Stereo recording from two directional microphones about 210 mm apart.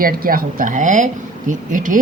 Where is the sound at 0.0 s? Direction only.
45° right (ahead or behind).